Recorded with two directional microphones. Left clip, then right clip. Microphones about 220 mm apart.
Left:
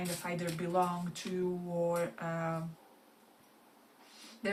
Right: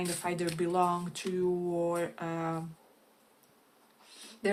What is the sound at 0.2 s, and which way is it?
Speech, 45° right (ahead or behind).